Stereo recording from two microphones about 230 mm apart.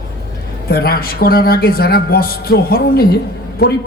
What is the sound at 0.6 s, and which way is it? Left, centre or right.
A man's voice, left.